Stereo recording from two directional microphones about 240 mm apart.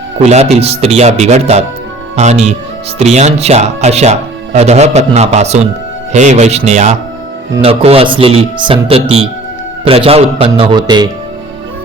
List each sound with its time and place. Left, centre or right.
0.2 s speech: right